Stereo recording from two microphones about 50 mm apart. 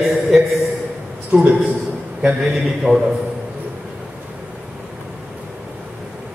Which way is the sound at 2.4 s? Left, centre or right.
Centre.